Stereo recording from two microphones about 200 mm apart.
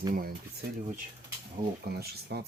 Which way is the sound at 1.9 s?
55° right (ahead or behind).